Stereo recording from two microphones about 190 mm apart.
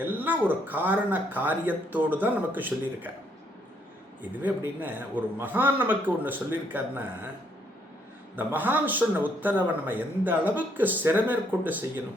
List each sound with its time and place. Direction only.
0.0 s a man's voice: 10° right (ahead or behind)
4.2 s a man's voice: 10° right (ahead or behind)
8.4 s a man's voice: 10° right (ahead or behind)